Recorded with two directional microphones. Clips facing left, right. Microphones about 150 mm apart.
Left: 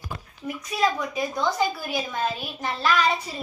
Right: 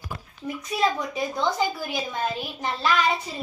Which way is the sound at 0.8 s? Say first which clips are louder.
Left 1 dB; 25° right (ahead or behind).